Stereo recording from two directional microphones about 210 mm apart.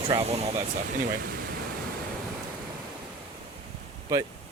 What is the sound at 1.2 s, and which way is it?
Speech, 45° right (ahead or behind).